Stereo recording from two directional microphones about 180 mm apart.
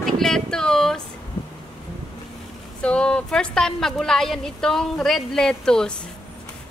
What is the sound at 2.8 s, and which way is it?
A woman's voice, 5° left (ahead or behind).